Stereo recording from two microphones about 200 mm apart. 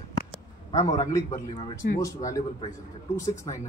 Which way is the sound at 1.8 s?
50° left (ahead or behind).